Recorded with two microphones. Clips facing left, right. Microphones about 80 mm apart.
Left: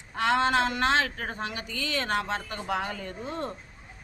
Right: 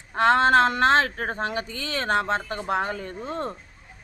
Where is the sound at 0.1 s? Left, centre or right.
Right.